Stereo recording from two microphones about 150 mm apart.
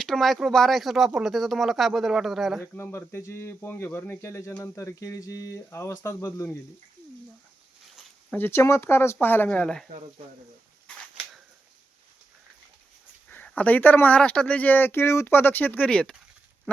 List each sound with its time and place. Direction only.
0.0 s speech: centre (ahead or behind)
2.7 s speech: 15° left (ahead or behind)
7.9 s speech: 10° left (ahead or behind)
13.3 s speech: 10° left (ahead or behind)